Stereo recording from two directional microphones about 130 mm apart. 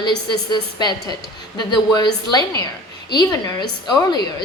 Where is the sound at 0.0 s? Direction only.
35° left (ahead or behind).